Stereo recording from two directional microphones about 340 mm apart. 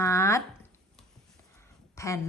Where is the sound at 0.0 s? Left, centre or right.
Centre.